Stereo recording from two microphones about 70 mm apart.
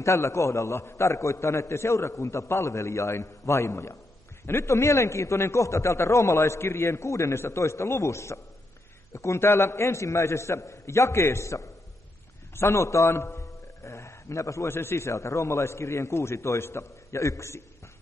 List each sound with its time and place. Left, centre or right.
0.0 s a man's voice: left